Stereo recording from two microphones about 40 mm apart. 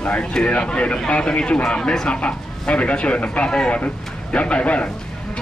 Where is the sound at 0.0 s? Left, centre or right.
Left.